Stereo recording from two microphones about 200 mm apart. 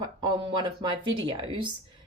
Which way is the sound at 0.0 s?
20° right (ahead or behind).